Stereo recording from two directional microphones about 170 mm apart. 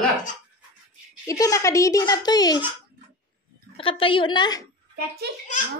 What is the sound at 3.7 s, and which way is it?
Speech, 30° left (ahead or behind).